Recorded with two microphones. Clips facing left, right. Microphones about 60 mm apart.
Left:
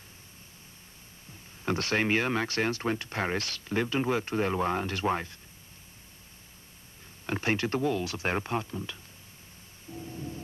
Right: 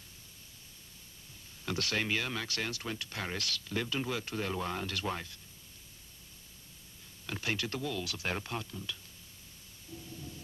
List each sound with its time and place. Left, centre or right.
1.6 s speech: left
7.2 s speech: left
9.8 s a sound: left